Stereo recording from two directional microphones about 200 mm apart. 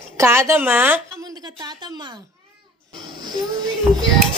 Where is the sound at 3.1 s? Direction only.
20° right (ahead or behind).